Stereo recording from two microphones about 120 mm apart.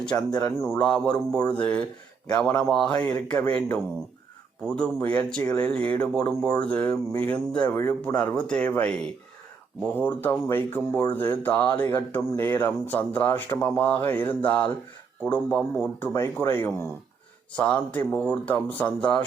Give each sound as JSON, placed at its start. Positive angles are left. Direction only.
{"t": 0.3, "sound": "speech", "side_deg": 35}
{"t": 0.8, "sound": "speech", "side_deg": 10}